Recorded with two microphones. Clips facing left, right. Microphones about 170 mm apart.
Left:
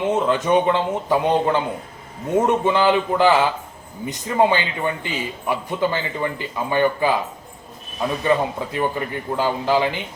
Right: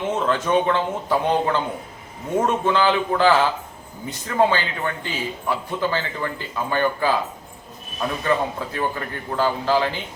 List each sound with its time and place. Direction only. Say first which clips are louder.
0.0 s a man's voice: left 3 dB; 15° left (ahead or behind)
8.2 s a man's voice: left 3 dB; 15° left (ahead or behind)